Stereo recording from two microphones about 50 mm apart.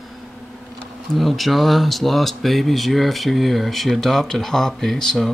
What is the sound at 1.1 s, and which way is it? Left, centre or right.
Speech, centre.